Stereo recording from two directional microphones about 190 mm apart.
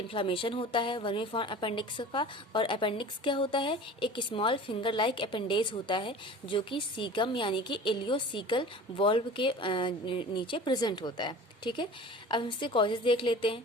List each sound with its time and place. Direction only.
0.1 s a woman's voice: 30° left (ahead or behind)